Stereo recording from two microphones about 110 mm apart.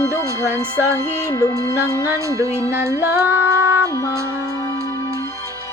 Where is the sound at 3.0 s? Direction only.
20° right (ahead or behind).